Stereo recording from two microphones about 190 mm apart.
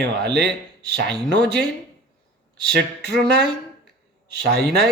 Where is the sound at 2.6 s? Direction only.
60° right (ahead or behind).